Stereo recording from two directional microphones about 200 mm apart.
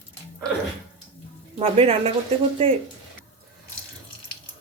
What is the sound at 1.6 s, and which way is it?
Speech, 30° right (ahead or behind).